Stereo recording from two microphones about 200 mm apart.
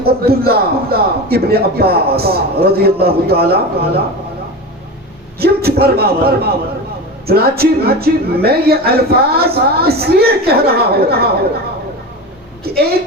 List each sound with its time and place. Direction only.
0.0 s a man's voice: 50° right (ahead or behind)
5.4 s a man's voice: 50° right (ahead or behind)
12.7 s a man's voice: 50° right (ahead or behind)